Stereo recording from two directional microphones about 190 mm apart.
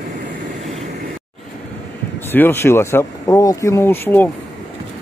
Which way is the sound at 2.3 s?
10° left (ahead or behind).